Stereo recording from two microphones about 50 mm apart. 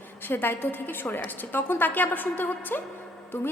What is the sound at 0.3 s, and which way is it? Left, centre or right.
A woman's voice, left.